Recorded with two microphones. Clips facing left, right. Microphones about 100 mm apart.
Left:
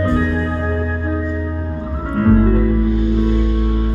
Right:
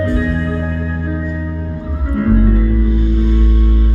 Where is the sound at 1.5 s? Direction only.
30° left (ahead or behind).